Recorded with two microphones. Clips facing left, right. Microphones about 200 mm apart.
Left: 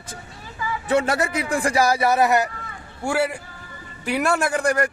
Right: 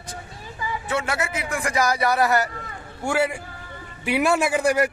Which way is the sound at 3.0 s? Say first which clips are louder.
Even; centre (ahead or behind).